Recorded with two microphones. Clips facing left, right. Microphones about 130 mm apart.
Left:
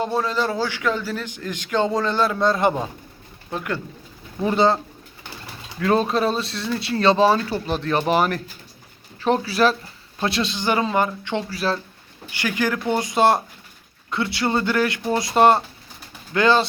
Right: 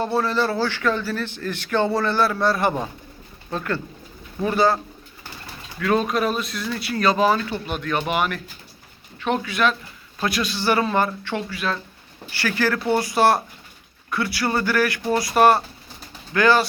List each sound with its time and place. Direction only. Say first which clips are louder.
0.0 s a man's voice: right 1 dB; 15° left (ahead or behind)
5.8 s speech: left 1 dB; 30° left (ahead or behind)
11.4 s speech: left 3 dB; 35° left (ahead or behind)
12.3 s a man's voice: right 1 dB; 15° left (ahead or behind)